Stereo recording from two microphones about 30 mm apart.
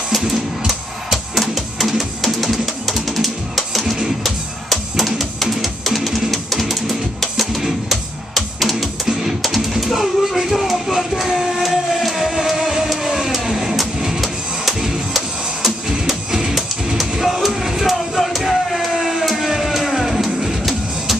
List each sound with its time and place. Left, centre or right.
0.7 s music: centre
9.0 s music: centre
9.4 s a sound: centre
14.2 s printer: centre
15.1 s music: centre
16.3 s music: centre
16.5 s music: centre
18.2 s a sound: centre
19.8 s music: centre